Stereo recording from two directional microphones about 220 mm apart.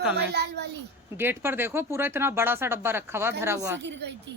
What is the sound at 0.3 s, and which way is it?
Speech, 50° right (ahead or behind).